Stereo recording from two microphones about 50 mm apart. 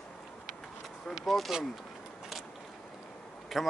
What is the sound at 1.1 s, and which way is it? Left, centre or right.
Speech, centre.